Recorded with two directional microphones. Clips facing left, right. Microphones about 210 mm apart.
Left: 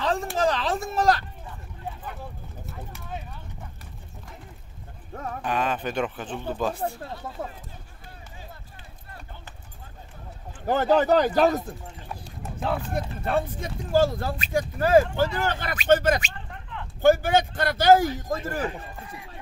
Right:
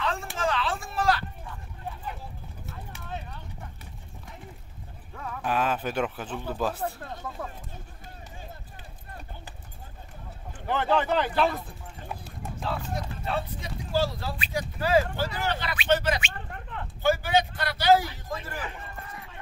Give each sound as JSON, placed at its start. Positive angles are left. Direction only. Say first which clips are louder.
{"t": 0.0, "sound": "a sound", "louder": "left 6 dB", "side_deg": 35}
{"t": 5.1, "sound": "clip-clop", "louder": "left 4 dB", "side_deg": 40}
{"t": 5.4, "sound": "speech", "louder": "even", "side_deg": -5}
{"t": 10.7, "sound": "speech", "louder": "left 5 dB", "side_deg": 40}
{"t": 12.5, "sound": "speech", "louder": "left 5 dB", "side_deg": 55}